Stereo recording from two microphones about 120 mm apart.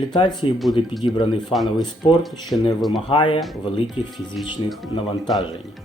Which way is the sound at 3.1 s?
50° left (ahead or behind).